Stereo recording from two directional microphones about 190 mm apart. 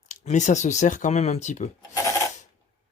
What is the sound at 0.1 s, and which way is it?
Speech, 40° left (ahead or behind).